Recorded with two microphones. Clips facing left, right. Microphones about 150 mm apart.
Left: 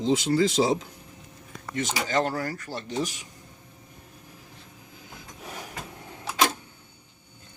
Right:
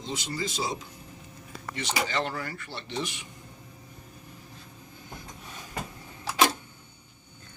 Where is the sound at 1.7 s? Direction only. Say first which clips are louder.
Left 4 dB; 45° left (ahead or behind).